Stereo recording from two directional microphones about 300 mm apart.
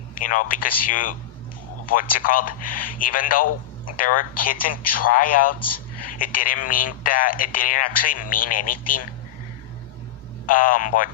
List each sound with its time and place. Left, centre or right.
0.1 s speech: left
10.4 s speech: left